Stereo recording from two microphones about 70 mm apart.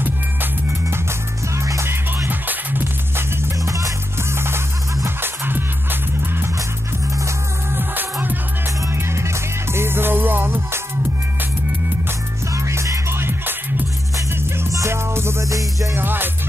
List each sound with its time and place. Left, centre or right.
0.0 s music: right
1.5 s music: right
3.6 s music: right
5.0 s music: right
7.7 s music: right
8.9 s music: right
12.5 s music: right
13.2 s music: right
14.7 s music: right
15.4 s music: right
15.9 s music: right